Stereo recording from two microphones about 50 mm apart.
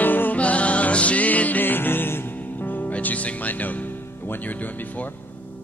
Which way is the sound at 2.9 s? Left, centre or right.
Left.